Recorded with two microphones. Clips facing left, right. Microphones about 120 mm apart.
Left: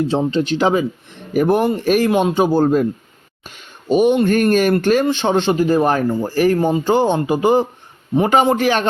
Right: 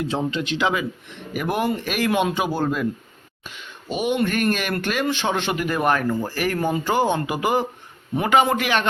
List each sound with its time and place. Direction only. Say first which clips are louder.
0.0 s speech: left 7 dB; 30° left (ahead or behind)